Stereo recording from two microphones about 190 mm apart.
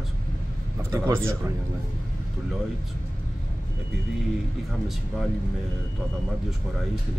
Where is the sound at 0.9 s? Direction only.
15° right (ahead or behind).